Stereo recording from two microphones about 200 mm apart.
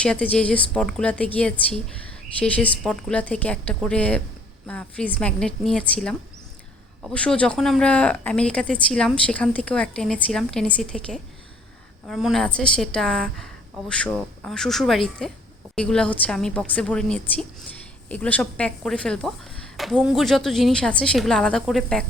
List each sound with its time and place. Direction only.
0.0 s a woman's voice: 5° left (ahead or behind)